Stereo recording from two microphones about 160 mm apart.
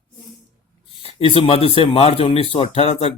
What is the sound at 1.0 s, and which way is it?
Speech, 35° left (ahead or behind).